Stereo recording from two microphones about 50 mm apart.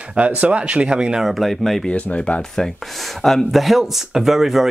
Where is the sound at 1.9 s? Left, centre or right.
Left.